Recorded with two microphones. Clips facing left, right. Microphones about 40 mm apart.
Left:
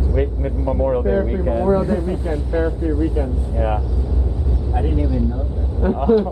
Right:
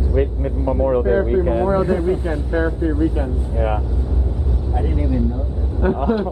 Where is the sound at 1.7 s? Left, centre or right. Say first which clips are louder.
Right 1 dB; right.